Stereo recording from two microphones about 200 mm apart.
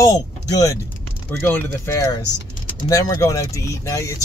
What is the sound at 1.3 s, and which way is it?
Speech, 10° left (ahead or behind).